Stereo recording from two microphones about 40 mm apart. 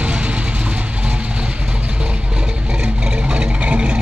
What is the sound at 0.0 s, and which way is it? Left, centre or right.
Vehicle, right.